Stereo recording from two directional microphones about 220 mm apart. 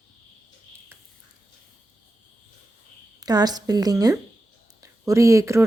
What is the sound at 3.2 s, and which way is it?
Speech, 15° right (ahead or behind).